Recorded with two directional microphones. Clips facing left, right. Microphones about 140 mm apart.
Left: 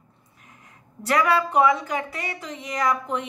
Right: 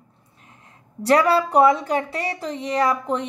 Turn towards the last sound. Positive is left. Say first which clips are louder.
# right 3 dB
turn(degrees=-35)  # may be behind; listen again after turning